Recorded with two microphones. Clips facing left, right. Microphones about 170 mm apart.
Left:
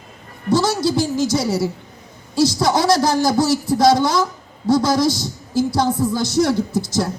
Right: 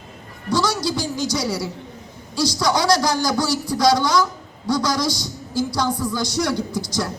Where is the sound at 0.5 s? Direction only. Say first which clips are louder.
Left 4 dB; 25° left (ahead or behind).